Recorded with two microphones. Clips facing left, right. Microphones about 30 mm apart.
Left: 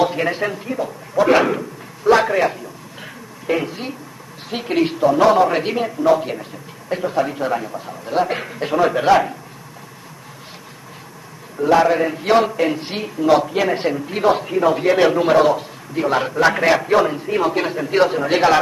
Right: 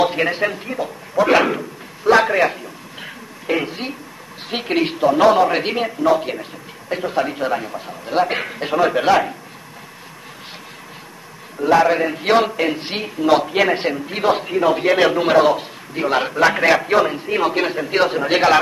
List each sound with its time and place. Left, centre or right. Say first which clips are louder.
0.0 s a sound: right 1 dB; right
0.3 s a man's voice: right 1 dB; right
2.0 s a sound: right 1 dB; right
3.4 s a woman's voice: even; centre
4.5 s a man's voice: left 1 dB; right
8.5 s a man's voice: even; centre
11.6 s a man's voice: even; right
16.4 s a man's voice: right 1 dB; centre
16.8 s a man's voice: left 1 dB; right